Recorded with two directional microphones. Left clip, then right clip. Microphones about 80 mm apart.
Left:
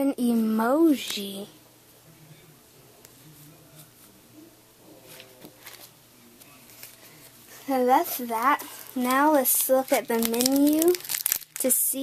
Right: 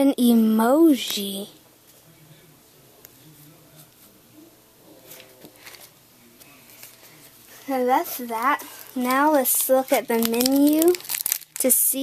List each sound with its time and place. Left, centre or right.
0.0 s speech: right
5.1 s a sound: centre
7.5 s speech: centre
9.2 s speech: centre
10.2 s speech: centre
10.8 s crumpling: centre
11.6 s speech: right